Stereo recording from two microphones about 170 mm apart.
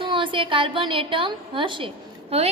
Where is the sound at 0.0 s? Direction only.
30° right (ahead or behind).